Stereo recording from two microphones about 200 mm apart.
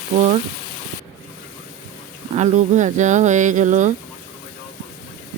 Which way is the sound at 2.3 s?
35° right (ahead or behind).